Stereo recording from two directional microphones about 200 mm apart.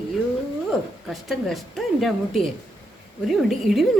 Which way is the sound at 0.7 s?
Centre (ahead or behind).